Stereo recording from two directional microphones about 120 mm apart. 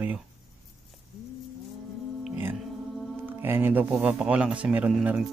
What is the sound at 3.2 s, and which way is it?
Speech, 15° right (ahead or behind).